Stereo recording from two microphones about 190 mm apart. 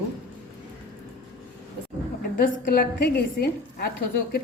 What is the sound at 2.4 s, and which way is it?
A woman's voice, 50° left (ahead or behind).